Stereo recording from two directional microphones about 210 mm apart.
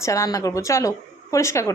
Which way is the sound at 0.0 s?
15° left (ahead or behind).